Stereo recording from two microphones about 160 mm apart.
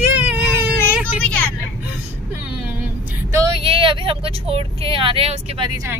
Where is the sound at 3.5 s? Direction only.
35° right (ahead or behind).